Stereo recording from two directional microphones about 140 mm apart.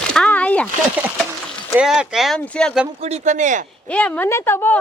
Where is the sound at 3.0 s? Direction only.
55° right (ahead or behind).